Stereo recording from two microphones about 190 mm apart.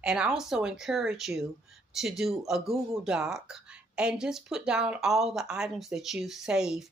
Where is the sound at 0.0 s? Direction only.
5° right (ahead or behind).